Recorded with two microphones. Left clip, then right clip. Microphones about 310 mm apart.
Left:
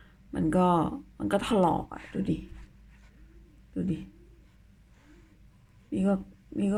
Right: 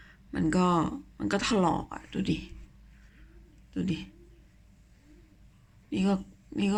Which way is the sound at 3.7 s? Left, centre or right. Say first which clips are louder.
Even; centre.